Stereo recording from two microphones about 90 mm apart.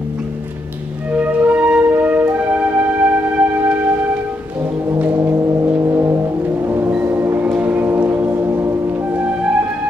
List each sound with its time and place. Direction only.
1.1 s music: 15° right (ahead or behind)
5.1 s foghorn: 35° right (ahead or behind)
6.6 s a sound: 25° right (ahead or behind)